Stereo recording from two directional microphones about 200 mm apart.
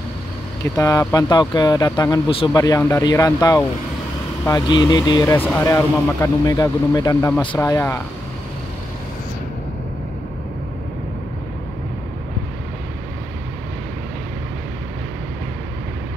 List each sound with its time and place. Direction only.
0.7 s speech: 15° left (ahead or behind)